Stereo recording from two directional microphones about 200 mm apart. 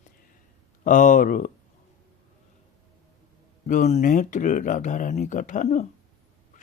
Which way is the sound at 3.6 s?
40° left (ahead or behind).